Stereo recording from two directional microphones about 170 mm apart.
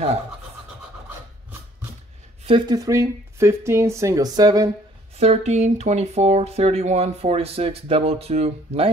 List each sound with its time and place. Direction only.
2.4 s speech: 25° right (ahead or behind)
5.2 s speech: 40° right (ahead or behind)